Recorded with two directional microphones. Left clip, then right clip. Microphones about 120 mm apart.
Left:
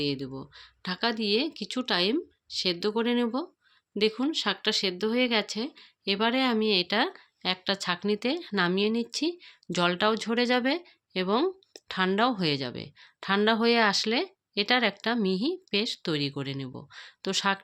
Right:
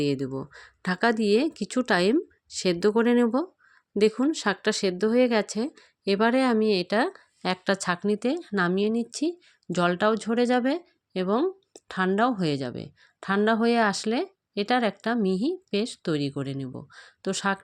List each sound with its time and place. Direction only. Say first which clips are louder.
0.0 s speech: right 4 dB; 90° right; by 7.2 s 50° right (ahead or behind)
7.4 s speech: right 3 dB; 80° right
8.0 s a woman's voice: right 2 dB; 40° right (ahead or behind)
11.3 s a sound: right 1 dB; 20° right (ahead or behind)
11.9 s a woman's voice: right 1 dB; 35° right (ahead or behind)